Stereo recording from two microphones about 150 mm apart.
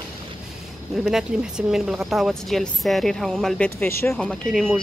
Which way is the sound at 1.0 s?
5° right (ahead or behind).